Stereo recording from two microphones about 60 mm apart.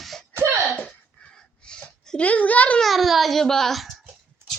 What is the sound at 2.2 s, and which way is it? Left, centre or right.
Speech, left.